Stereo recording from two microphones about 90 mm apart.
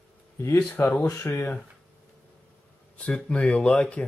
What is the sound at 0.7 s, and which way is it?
Speech, 20° left (ahead or behind).